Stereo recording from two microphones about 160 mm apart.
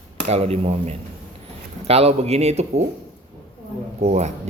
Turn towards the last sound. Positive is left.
turn(degrees=-45)  # may be behind; listen again after turning